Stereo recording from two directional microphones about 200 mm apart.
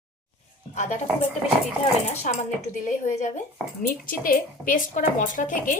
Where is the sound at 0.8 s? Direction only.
35° left (ahead or behind).